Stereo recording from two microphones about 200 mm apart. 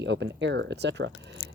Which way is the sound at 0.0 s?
60° right (ahead or behind).